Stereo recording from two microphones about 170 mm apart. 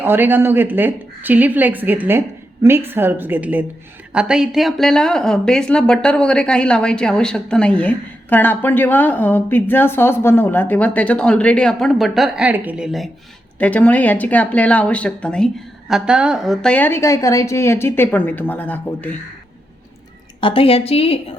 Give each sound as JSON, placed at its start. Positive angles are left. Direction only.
{"t": 0.0, "sound": "speech", "side_deg": -10}
{"t": 13.6, "sound": "a woman's voice", "side_deg": 10}
{"t": 20.4, "sound": "a woman's voice", "side_deg": 30}